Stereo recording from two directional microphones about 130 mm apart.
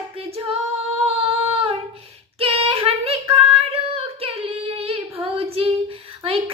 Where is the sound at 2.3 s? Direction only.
50° right (ahead or behind).